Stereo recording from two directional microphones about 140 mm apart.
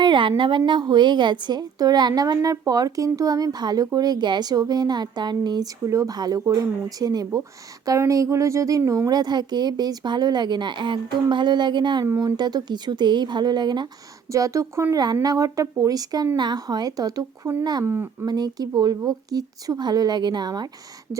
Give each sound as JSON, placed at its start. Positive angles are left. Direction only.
{"t": 0.0, "sound": "a woman's voice", "side_deg": -35}
{"t": 17.9, "sound": "speech", "side_deg": -15}
{"t": 18.3, "sound": "a woman's voice", "side_deg": -30}